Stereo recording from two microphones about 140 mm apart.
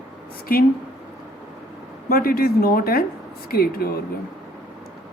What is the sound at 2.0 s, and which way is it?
A woman's voice, 90° left.